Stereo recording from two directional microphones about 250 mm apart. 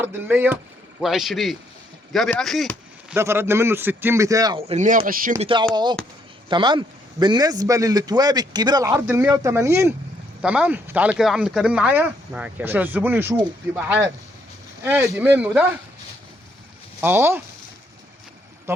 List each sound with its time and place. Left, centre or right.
0.0 s a man's voice: centre
3.2 s a man's voice: centre; by 5.5 s right
5.7 s a man's voice: centre
14.8 s a man's voice: centre
17.0 s a man's voice: centre